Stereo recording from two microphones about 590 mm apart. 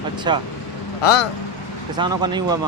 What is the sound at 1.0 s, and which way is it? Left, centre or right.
Speech, left.